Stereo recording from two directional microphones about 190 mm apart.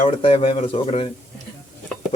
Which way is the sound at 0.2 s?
30° left (ahead or behind).